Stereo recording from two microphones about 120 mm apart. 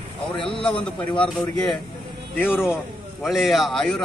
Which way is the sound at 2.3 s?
15° left (ahead or behind).